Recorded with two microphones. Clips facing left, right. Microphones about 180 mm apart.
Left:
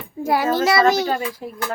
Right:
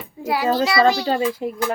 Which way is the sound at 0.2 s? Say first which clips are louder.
Left 1 dB; 50° left (ahead or behind).